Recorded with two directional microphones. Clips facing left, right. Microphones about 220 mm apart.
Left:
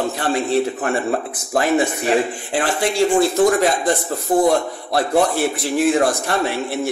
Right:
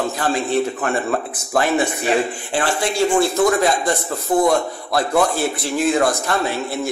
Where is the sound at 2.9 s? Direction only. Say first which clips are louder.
Left 2 dB; 35° left (ahead or behind).